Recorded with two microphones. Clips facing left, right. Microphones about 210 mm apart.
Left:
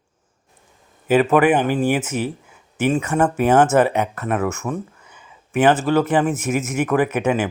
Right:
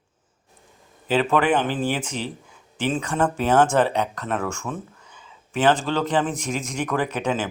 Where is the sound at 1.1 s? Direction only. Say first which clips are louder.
Left 5 dB; 10° left (ahead or behind).